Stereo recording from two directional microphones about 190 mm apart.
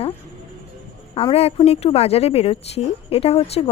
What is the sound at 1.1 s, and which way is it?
A woman's voice, 30° left (ahead or behind).